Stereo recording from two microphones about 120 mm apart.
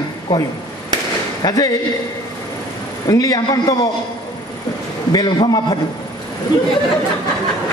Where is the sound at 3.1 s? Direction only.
30° left (ahead or behind).